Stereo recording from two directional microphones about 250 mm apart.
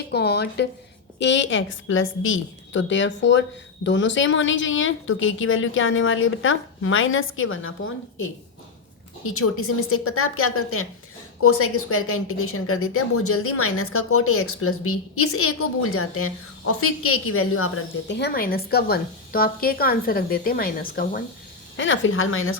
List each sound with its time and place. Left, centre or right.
0.1 s a woman's voice: left
21.8 s a woman's voice: left